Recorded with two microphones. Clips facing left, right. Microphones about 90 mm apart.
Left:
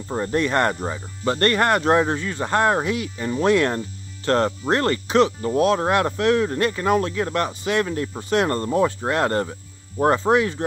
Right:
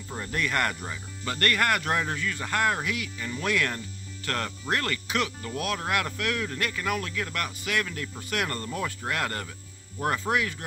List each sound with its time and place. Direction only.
0.1 s speech: 30° left (ahead or behind)